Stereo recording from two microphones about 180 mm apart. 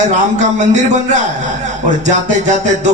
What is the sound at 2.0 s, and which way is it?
Speech, 40° right (ahead or behind).